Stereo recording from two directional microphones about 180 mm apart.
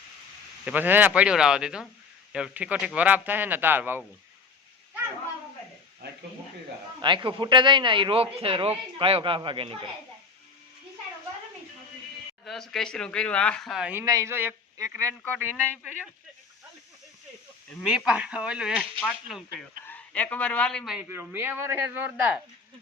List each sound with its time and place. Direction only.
0.6 s speech: 10° right (ahead or behind)
7.0 s a man's voice: 25° right (ahead or behind)
12.5 s a man's voice: centre (ahead or behind)
14.0 s speech: 20° right (ahead or behind)
17.8 s a man's voice: 5° right (ahead or behind)
19.5 s a man's voice: 10° left (ahead or behind); by 22.4 s 10° right (ahead or behind)